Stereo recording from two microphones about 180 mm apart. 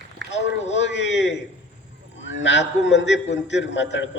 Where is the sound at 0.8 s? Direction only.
80° left.